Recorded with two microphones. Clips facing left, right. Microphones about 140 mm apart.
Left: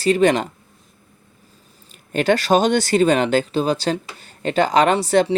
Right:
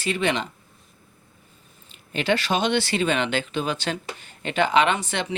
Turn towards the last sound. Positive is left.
turn(degrees=40)  # may be behind; listen again after turning